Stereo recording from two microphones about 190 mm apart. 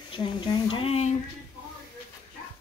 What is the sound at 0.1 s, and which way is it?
Speech, 25° left (ahead or behind).